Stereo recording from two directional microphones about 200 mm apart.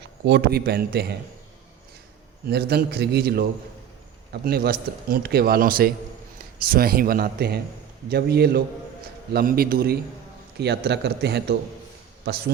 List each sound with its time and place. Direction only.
0.3 s a man's voice: 55° right (ahead or behind)
2.5 s a man's voice: 55° right (ahead or behind)